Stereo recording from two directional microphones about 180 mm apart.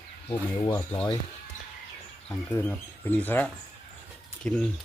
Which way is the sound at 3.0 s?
10° left (ahead or behind).